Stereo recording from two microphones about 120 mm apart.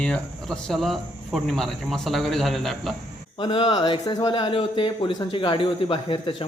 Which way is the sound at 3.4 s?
45° left (ahead or behind).